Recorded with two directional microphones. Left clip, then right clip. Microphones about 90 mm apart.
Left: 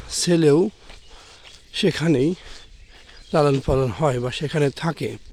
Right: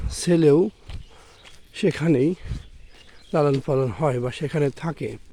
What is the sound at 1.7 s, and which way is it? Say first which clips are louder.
Speech: left 1 dB; centre (ahead or behind).